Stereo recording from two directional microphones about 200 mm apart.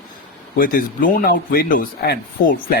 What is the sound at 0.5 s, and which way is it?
Speech, 45° left (ahead or behind).